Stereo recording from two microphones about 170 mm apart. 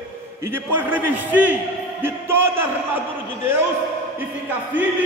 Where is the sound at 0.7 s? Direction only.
10° right (ahead or behind).